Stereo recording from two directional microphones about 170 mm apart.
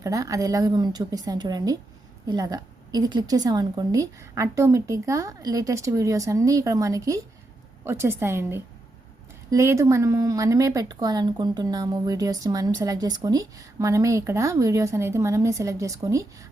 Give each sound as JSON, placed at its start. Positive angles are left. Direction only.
{"t": 0.0, "sound": "a woman's voice", "side_deg": -20}